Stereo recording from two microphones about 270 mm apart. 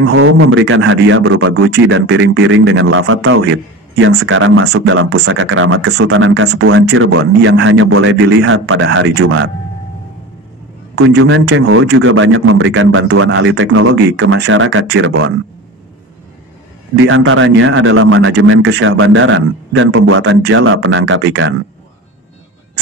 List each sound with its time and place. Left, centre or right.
0.0 s speech: right
1.7 s speech: right
11.0 s speech: right
17.0 s speech: right